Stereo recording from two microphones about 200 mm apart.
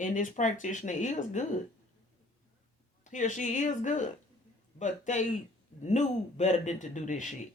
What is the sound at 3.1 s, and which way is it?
A man's voice, 40° left (ahead or behind).